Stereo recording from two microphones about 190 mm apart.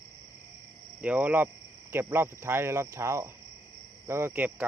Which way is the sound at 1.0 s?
10° right (ahead or behind).